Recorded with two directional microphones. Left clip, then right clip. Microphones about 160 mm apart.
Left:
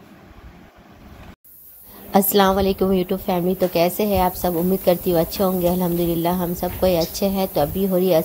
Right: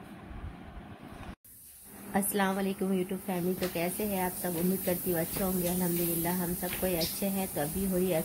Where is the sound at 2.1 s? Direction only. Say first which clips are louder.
Left 14 dB; 45° left (ahead or behind).